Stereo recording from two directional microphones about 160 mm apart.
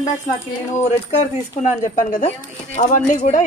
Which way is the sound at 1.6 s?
50° left (ahead or behind).